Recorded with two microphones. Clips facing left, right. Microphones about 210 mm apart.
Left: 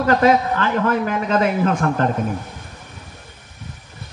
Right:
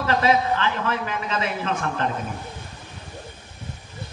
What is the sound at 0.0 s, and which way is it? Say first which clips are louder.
A man's voice: left 5 dB; 45° left (ahead or behind).